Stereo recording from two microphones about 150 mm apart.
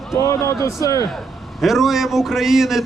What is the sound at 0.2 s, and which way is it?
Speech, 20° left (ahead or behind).